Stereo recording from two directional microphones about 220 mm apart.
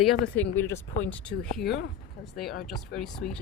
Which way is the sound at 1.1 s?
5° left (ahead or behind).